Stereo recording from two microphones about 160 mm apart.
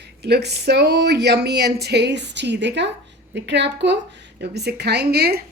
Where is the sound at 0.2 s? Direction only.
90° right.